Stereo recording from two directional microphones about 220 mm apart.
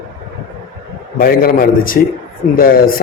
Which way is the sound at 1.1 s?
40° left (ahead or behind).